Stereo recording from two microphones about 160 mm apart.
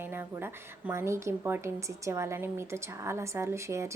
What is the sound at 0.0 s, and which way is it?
A woman's voice, 15° right (ahead or behind).